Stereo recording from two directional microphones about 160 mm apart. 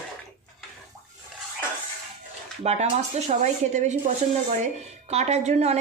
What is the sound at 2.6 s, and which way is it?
Speech, 45° right (ahead or behind).